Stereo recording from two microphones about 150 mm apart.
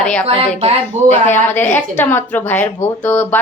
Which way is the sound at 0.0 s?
5° left (ahead or behind).